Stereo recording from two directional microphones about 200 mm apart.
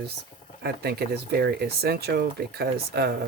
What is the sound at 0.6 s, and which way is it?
Speech, 55° right (ahead or behind).